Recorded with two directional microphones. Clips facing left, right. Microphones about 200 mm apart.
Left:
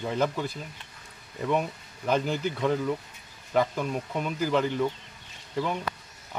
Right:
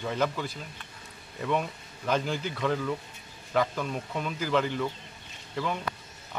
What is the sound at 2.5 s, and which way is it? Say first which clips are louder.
Speech: left 1 dB; 15° left (ahead or behind).